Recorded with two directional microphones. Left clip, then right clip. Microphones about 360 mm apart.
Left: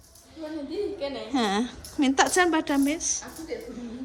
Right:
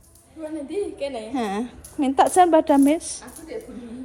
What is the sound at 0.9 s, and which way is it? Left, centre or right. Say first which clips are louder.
Speech: right 3 dB; right.